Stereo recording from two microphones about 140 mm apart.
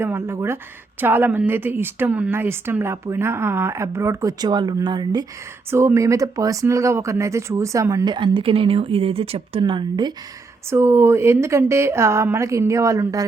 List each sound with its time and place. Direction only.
0.0 s a woman's voice: 15° right (ahead or behind)
5.7 s speech: 20° right (ahead or behind)
10.7 s speech: 20° right (ahead or behind)